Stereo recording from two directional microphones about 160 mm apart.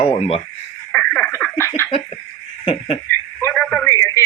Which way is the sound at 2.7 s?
35° left (ahead or behind).